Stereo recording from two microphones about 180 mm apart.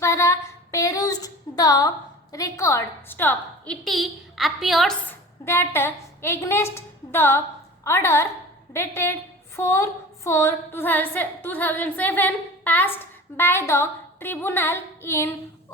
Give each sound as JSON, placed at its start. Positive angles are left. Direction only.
{"t": 0.0, "sound": "a sound", "side_deg": 15}
{"t": 2.3, "sound": "a woman's voice", "side_deg": 15}
{"t": 3.8, "sound": "a woman's voice", "side_deg": 0}
{"t": 5.5, "sound": "a woman's voice", "side_deg": 15}